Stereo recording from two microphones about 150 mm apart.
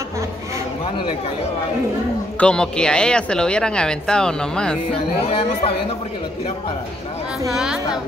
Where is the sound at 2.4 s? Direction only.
5° left (ahead or behind).